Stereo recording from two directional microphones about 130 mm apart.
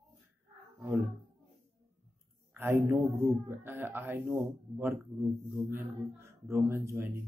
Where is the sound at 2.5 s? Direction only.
20° right (ahead or behind).